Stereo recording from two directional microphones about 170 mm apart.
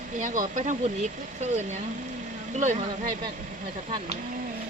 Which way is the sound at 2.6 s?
45° right (ahead or behind).